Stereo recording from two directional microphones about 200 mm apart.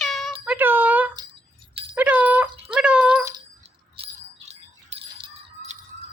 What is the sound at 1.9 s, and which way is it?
Dog, 10° right (ahead or behind).